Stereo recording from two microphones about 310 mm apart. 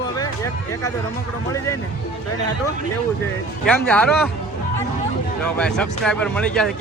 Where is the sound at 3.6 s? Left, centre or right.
Centre.